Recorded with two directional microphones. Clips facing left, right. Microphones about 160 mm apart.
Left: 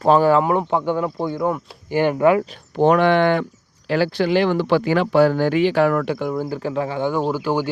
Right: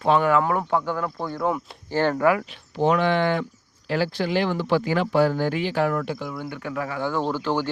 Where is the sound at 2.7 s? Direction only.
60° left (ahead or behind).